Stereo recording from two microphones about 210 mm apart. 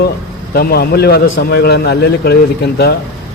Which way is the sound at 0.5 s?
45° left (ahead or behind).